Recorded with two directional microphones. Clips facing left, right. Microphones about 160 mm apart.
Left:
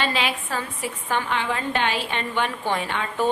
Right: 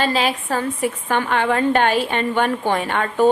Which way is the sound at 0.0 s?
40° right (ahead or behind).